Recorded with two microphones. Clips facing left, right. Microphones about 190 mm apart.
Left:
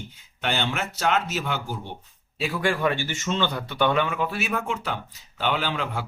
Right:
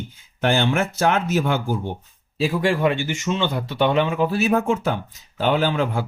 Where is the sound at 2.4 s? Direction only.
25° right (ahead or behind).